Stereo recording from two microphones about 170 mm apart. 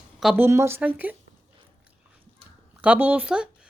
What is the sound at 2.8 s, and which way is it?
Speech, 10° right (ahead or behind).